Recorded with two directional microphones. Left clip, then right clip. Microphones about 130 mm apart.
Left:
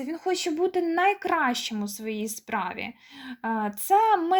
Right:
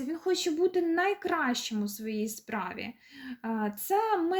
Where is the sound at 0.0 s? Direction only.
30° left (ahead or behind).